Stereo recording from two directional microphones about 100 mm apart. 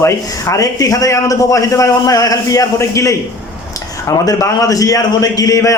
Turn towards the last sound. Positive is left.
turn(degrees=35)  # may be behind; listen again after turning